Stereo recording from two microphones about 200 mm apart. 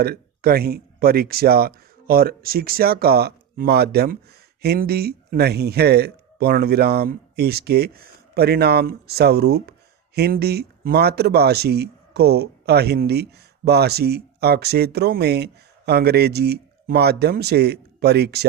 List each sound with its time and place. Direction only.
0.0 s speech: 50° right (ahead or behind)